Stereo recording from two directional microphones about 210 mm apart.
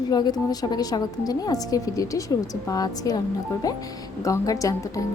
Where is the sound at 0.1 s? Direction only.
20° left (ahead or behind).